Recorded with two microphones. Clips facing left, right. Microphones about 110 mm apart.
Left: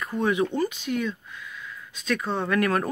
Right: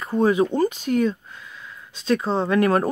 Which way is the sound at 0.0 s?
30° right (ahead or behind).